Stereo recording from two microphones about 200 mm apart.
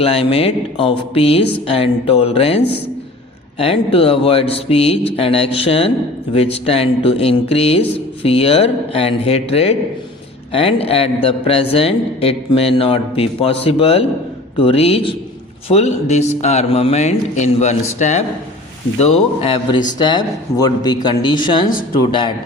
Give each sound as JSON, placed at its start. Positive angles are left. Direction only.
{"t": 0.0, "sound": "speech", "side_deg": 30}
{"t": 3.6, "sound": "a man's voice", "side_deg": 30}